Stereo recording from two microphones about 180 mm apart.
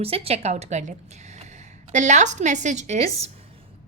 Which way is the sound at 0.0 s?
35° right (ahead or behind).